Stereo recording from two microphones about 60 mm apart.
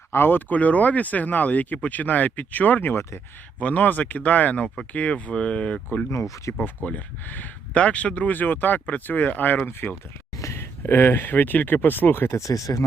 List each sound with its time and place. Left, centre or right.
0.1 s speech: left
2.9 s speech: left
3.6 s speech: left
6.1 s speech: left
6.8 s speech: left
10.3 s speech: left
12.4 s speech: left